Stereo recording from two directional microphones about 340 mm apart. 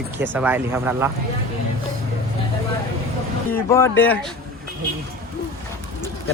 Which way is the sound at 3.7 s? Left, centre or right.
Centre.